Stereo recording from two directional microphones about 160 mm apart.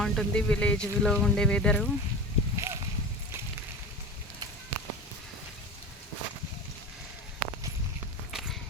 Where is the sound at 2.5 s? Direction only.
15° right (ahead or behind).